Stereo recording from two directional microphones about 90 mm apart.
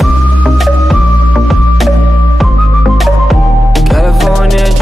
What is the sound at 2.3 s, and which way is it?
Music, centre (ahead or behind).